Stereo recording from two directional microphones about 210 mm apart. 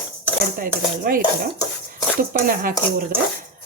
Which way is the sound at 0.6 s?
40° right (ahead or behind).